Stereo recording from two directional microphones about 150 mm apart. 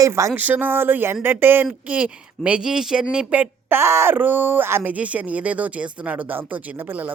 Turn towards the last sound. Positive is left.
turn(degrees=-10)  # may be behind; listen again after turning